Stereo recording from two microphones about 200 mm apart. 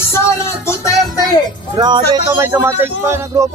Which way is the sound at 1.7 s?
20° right (ahead or behind).